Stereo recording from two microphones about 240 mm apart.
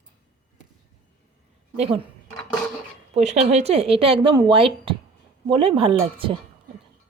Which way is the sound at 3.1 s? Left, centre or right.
Right.